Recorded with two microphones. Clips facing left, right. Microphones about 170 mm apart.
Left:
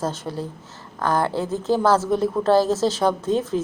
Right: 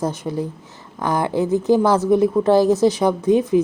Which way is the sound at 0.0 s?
20° right (ahead or behind).